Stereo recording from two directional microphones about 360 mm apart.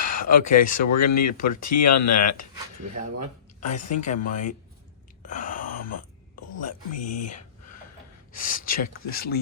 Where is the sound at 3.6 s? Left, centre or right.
Centre.